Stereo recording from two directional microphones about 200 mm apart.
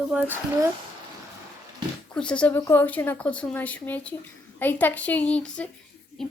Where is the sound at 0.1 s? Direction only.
10° right (ahead or behind).